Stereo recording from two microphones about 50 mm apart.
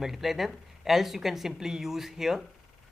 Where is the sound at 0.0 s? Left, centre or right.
Centre.